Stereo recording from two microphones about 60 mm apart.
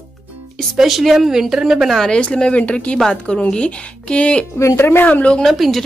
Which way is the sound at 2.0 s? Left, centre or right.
Centre.